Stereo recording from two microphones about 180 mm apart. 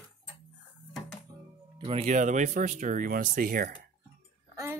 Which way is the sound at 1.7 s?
30° right (ahead or behind).